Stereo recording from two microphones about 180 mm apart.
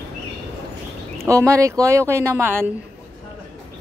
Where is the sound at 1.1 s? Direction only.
15° right (ahead or behind).